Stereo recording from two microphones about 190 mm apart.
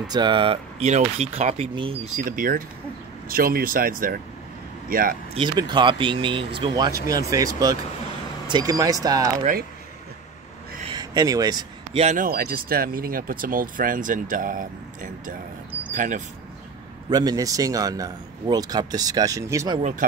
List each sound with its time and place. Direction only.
0.1 s speech: 25° right (ahead or behind)
2.2 s a man's voice: 45° right (ahead or behind)
5.3 s speech: 25° right (ahead or behind)
9.4 s speech: 45° right (ahead or behind)
10.9 s a sound: 20° right (ahead or behind)
12.0 s speech: 40° right (ahead or behind)
17.1 s speech: 20° right (ahead or behind)